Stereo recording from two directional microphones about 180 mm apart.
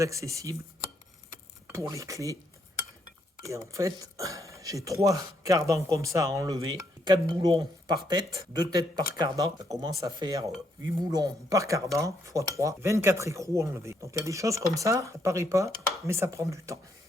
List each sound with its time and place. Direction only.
0.0 s speech: 15° right (ahead or behind)
1.6 s speech: 15° right (ahead or behind)
3.5 s speech: 15° right (ahead or behind)